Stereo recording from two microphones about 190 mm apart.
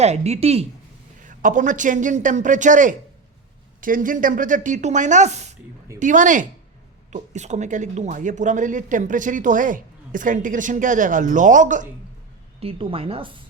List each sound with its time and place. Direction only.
0.0 s a man's voice: 35° right (ahead or behind)
1.2 s a man's voice: 45° right (ahead or behind)
12.5 s speech: 30° right (ahead or behind)